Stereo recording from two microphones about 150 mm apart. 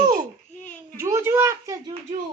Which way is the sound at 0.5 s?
10° left (ahead or behind).